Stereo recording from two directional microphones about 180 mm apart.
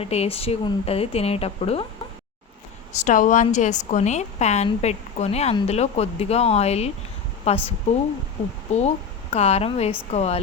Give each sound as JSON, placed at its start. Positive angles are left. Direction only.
{"t": 0.0, "sound": "a woman's voice", "side_deg": 35}
{"t": 2.9, "sound": "a woman's voice", "side_deg": 45}
{"t": 8.7, "sound": "a woman's voice", "side_deg": 40}